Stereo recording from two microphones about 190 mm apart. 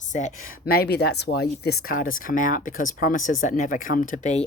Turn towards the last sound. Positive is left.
turn(degrees=40)  # may be behind; listen again after turning